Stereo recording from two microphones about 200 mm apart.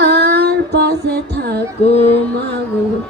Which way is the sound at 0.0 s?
55° right (ahead or behind).